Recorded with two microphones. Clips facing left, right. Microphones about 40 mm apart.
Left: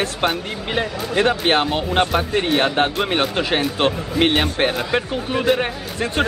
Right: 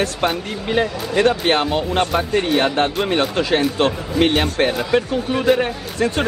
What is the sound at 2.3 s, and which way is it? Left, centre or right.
Speech, centre.